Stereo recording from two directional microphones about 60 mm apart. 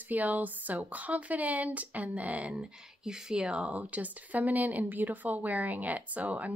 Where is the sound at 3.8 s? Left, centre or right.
Right.